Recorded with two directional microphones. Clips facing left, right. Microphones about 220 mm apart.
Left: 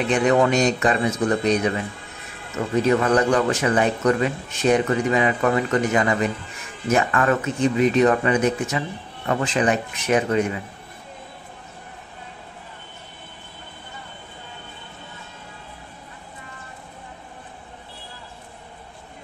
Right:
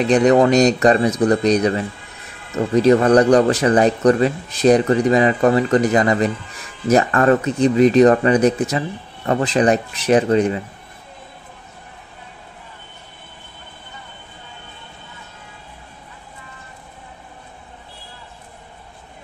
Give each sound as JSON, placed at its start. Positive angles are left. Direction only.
{"t": 0.1, "sound": "speech", "side_deg": -40}